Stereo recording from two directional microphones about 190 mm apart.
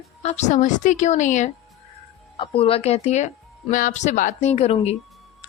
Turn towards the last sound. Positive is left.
turn(degrees=30)  # may be behind; listen again after turning